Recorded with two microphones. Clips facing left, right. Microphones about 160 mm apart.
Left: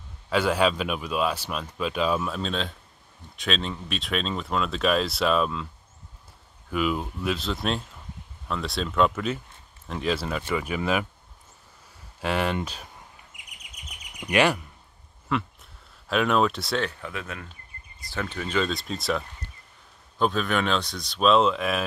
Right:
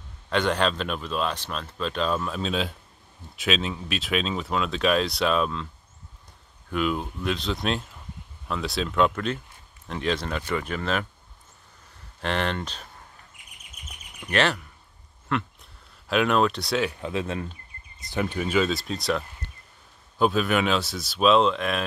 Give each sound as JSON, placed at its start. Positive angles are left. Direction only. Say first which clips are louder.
{"t": 0.3, "sound": "speech", "louder": "left 1 dB", "side_deg": 5}
{"t": 6.7, "sound": "speech", "louder": "even", "side_deg": 5}
{"t": 12.2, "sound": "speech", "louder": "left 1 dB", "side_deg": 10}
{"t": 13.8, "sound": "chirp", "louder": "left 3 dB", "side_deg": 15}
{"t": 15.2, "sound": "a sound", "louder": "even", "side_deg": 0}
{"t": 17.0, "sound": "speech", "louder": "right 7 dB", "side_deg": -25}
{"t": 18.0, "sound": "speech", "louder": "right 4 dB", "side_deg": -15}